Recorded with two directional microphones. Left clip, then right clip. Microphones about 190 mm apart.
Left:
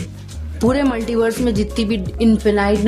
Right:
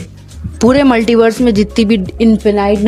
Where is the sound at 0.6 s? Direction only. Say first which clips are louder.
Right 8 dB; 25° right (ahead or behind).